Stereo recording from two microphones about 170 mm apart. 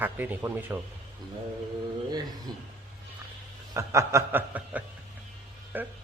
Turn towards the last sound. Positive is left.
turn(degrees=-10)  # may be behind; listen again after turning